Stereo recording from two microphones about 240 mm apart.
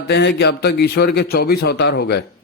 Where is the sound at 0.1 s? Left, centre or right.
Left.